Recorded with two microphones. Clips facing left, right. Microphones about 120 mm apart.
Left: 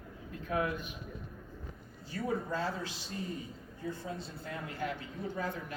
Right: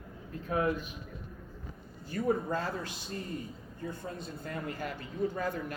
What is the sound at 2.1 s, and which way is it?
Speech, 50° right (ahead or behind).